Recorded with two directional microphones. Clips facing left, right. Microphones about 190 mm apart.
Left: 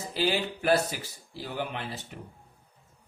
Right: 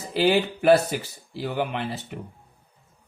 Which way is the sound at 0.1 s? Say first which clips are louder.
Right 8 dB; 70° right (ahead or behind).